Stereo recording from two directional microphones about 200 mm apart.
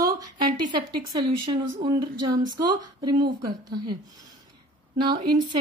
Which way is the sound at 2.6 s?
20° right (ahead or behind).